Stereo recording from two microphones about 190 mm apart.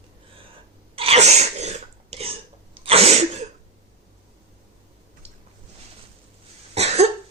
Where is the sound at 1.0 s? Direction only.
35° right (ahead or behind).